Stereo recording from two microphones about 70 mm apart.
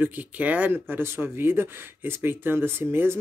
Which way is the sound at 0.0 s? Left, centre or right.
Right.